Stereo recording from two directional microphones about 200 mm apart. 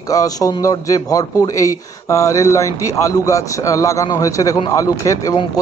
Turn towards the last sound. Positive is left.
turn(degrees=15)  # may be behind; listen again after turning